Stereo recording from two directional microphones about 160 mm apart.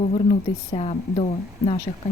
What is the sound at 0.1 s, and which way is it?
Speech, 45° left (ahead or behind).